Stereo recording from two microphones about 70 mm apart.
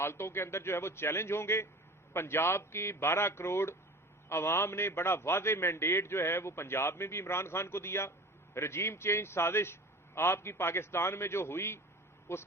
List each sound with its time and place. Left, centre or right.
0.0 s a man's voice: left